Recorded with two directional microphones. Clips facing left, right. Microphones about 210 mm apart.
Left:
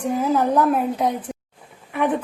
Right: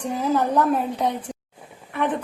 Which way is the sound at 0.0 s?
10° left (ahead or behind).